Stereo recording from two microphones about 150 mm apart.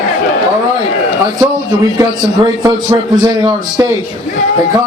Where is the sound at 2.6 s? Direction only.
25° right (ahead or behind).